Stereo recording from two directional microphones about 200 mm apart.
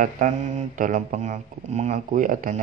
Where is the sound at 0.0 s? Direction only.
40° right (ahead or behind).